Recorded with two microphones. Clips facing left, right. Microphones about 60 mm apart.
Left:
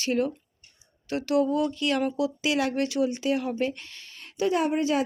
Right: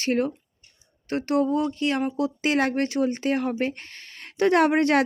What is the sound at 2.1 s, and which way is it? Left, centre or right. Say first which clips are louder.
Speech: right 2 dB; right.